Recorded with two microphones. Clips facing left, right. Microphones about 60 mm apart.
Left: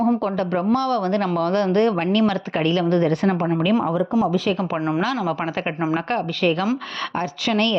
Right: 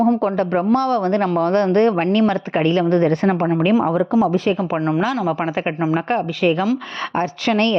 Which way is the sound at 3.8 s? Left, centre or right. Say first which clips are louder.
Right 3 dB; right.